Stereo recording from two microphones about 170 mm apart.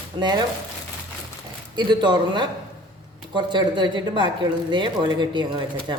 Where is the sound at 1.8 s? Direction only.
25° right (ahead or behind).